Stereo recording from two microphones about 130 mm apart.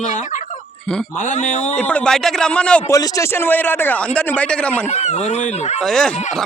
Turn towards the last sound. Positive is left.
turn(degrees=5)  # may be behind; listen again after turning